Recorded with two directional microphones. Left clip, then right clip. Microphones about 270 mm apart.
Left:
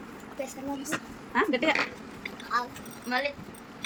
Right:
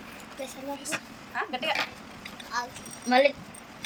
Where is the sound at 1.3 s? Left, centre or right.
Left.